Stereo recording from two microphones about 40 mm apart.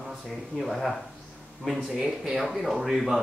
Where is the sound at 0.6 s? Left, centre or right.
Centre.